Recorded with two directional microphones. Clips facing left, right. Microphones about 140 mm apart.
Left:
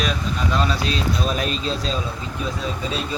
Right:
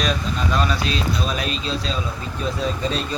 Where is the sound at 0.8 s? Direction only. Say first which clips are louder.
Left 1 dB; 40° left (ahead or behind).